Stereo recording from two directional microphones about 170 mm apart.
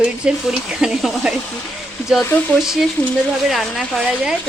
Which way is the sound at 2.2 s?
10° left (ahead or behind).